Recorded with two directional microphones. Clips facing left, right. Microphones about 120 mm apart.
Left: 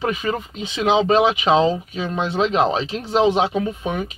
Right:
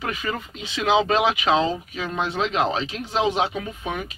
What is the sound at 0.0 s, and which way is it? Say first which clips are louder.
Speech: left 6 dB; 25° left (ahead or behind).